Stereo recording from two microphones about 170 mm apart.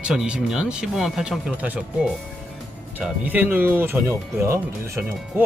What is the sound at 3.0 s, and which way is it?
Speech, 10° right (ahead or behind).